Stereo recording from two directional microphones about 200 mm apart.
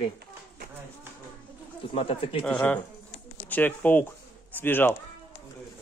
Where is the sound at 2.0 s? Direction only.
30° left (ahead or behind).